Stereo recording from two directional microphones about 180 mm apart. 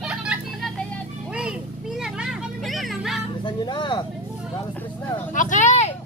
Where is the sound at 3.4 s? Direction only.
25° left (ahead or behind).